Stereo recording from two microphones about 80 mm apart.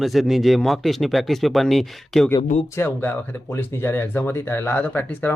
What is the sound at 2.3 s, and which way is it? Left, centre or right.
Speech, left.